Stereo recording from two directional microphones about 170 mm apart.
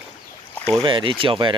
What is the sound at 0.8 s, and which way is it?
Speech, 30° right (ahead or behind).